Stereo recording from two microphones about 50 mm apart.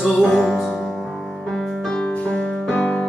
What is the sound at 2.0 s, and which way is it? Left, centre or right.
Music, left.